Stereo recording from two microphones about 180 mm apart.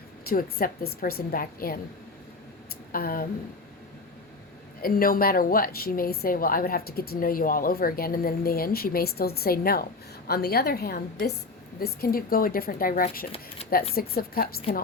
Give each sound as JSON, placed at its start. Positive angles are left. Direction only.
{"t": 0.3, "sound": "a woman's voice", "side_deg": 55}
{"t": 2.9, "sound": "a woman's voice", "side_deg": 55}
{"t": 4.8, "sound": "a woman's voice", "side_deg": 55}
{"t": 13.6, "sound": "a sound", "side_deg": 35}
{"t": 14.2, "sound": "a woman's voice", "side_deg": 55}